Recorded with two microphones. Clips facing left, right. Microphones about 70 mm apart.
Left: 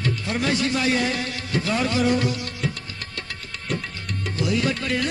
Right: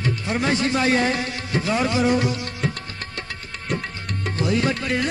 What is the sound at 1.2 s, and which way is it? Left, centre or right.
Music, right.